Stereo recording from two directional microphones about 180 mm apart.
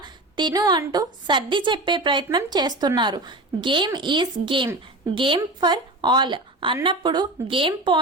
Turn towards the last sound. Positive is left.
turn(degrees=-30)  # may be behind; listen again after turning